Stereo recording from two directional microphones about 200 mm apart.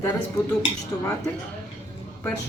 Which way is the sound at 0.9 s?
15° left (ahead or behind).